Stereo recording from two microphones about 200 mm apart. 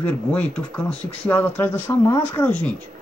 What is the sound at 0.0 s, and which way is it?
Speech, 5° left (ahead or behind).